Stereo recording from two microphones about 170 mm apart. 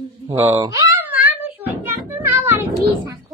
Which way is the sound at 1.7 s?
10° right (ahead or behind).